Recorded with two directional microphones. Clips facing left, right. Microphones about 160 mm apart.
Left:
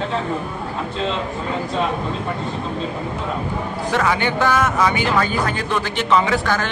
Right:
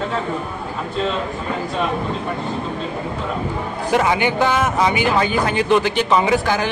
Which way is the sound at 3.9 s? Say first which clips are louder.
Right 3 dB; 15° right (ahead or behind).